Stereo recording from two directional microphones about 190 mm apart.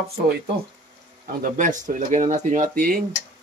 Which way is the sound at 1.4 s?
45° right (ahead or behind).